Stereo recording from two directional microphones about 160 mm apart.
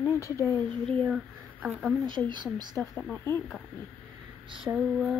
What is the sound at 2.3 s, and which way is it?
Speech, 30° right (ahead or behind).